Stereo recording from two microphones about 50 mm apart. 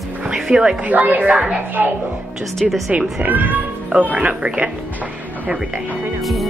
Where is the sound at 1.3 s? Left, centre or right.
Right.